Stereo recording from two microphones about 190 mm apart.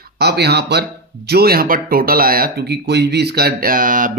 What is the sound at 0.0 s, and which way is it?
Speech, 55° right (ahead or behind).